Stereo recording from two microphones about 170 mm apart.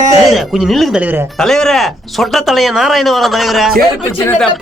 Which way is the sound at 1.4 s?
5° left (ahead or behind).